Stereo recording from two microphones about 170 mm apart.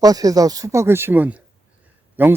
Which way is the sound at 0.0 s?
20° right (ahead or behind).